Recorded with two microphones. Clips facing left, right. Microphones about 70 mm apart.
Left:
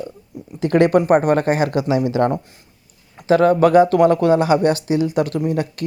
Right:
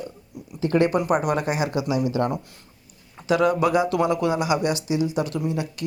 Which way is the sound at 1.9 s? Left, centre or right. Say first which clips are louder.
Left 6 dB; left.